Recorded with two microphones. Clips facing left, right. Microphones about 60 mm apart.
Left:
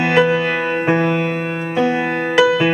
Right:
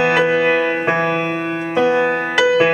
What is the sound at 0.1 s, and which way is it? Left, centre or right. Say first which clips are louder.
Music: right 1 dB; centre.